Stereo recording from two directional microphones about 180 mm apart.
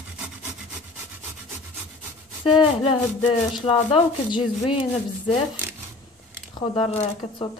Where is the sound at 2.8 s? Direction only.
30° left (ahead or behind).